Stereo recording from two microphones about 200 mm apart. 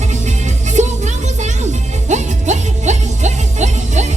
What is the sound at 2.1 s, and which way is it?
Music, 35° right (ahead or behind).